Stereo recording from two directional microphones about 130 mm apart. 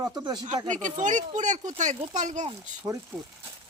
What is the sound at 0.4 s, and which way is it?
Speech, 70° right (ahead or behind).